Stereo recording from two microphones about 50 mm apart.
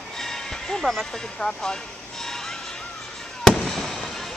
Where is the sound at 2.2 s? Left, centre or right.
Centre.